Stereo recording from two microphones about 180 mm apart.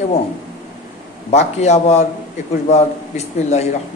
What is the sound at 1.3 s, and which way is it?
A man's voice, 40° left (ahead or behind).